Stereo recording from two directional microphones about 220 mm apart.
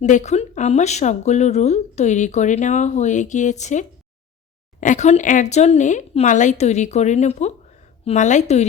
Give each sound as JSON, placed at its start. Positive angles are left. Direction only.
{"t": 0.0, "sound": "speech", "side_deg": 30}